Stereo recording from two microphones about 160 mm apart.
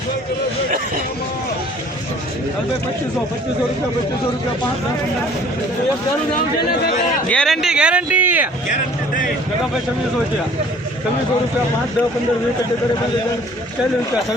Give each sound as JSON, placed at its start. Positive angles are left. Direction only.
{"t": 7.3, "sound": "speech", "side_deg": 5}
{"t": 8.7, "sound": "speech", "side_deg": 55}